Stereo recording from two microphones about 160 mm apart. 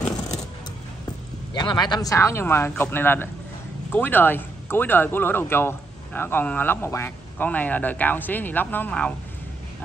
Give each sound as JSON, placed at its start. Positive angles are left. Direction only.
{"t": 1.5, "sound": "speech", "side_deg": 30}